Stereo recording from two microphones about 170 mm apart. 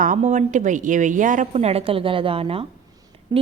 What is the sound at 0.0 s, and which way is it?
A woman's voice, 50° right (ahead or behind).